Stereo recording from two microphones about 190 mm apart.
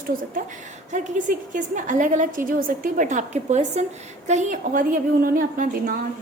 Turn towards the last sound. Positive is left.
turn(degrees=-45)  # may be behind; listen again after turning